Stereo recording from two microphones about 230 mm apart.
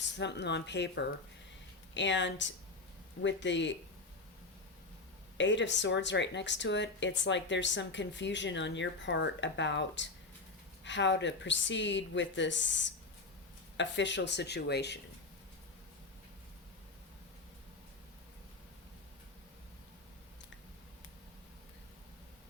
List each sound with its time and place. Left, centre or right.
0.2 s a woman's voice: left
5.4 s a woman's voice: left